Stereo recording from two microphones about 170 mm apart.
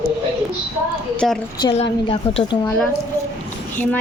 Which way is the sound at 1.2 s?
Centre (ahead or behind).